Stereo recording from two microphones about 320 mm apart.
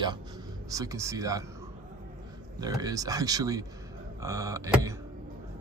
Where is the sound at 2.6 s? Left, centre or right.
Centre.